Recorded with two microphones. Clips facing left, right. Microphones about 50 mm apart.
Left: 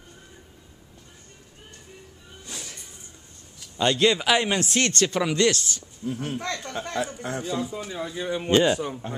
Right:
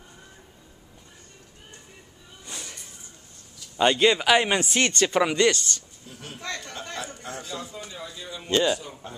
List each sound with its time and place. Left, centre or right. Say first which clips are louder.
2.4 s a sound: even; centre
3.7 s speech: right 1 dB; centre
6.0 s speech: left 8 dB; left; by 7.8 s centre
8.0 s speech: left 9 dB; left
8.5 s speech: left 3 dB; centre
9.0 s speech: left 6 dB; left